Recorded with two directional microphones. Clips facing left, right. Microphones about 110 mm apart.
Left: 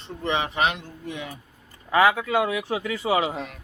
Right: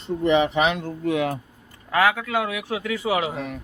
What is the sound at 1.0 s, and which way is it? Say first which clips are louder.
Speech: right 13 dB; 90° right.